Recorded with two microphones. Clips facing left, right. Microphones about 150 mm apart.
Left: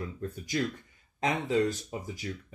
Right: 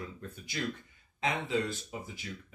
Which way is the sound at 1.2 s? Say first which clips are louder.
Left 5 dB; 40° left (ahead or behind).